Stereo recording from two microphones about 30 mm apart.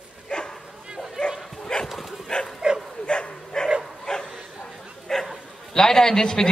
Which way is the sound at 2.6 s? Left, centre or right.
Right.